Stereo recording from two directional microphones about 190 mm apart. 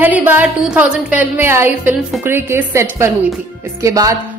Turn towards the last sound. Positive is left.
turn(degrees=-15)  # may be behind; listen again after turning